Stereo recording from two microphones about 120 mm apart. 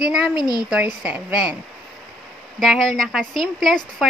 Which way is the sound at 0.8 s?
15° right (ahead or behind).